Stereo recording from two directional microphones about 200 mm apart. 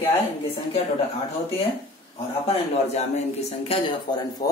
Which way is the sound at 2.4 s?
30° left (ahead or behind).